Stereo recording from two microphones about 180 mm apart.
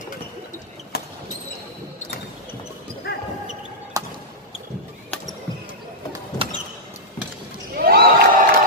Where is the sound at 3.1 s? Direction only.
55° left (ahead or behind).